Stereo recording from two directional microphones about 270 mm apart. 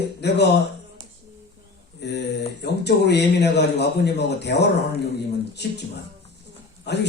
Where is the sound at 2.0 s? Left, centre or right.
Left.